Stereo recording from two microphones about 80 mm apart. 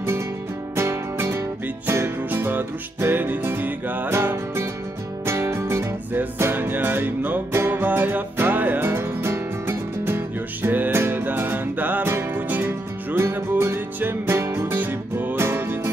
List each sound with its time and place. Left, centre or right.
0.7 s music: right